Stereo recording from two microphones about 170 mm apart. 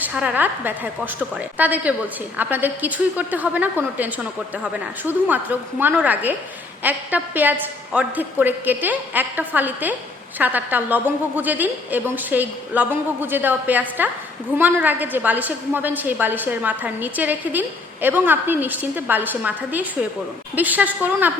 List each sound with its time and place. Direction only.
0.0 s a woman's voice: 5° right (ahead or behind)